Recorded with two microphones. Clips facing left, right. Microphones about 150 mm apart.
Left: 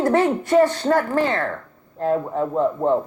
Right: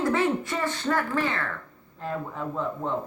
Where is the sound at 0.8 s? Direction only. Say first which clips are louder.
Left 7 dB; 40° left (ahead or behind).